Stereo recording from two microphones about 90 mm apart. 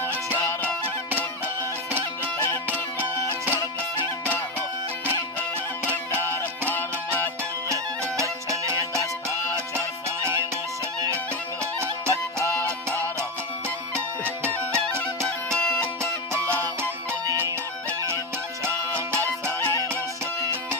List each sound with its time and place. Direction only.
3.0 s music: 25° right (ahead or behind)
5.9 s music: 25° left (ahead or behind)
7.7 s music: 35° right (ahead or behind)
11.6 s music: 30° right (ahead or behind)
12.5 s music: 20° left (ahead or behind)
13.9 s music: 25° right (ahead or behind)
14.7 s music: 15° left (ahead or behind)
19.2 s music: 25° left (ahead or behind)